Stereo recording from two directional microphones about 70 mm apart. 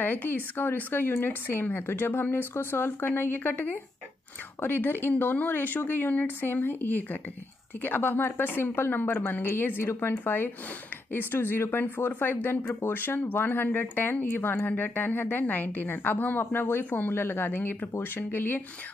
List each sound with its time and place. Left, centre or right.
0.0 s a woman's voice: left